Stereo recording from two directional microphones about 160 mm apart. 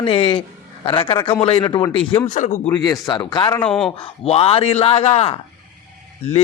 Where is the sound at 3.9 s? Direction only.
35° left (ahead or behind).